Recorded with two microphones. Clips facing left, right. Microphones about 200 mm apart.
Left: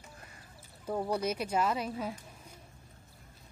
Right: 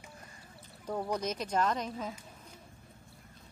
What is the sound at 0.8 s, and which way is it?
Speech, 10° left (ahead or behind).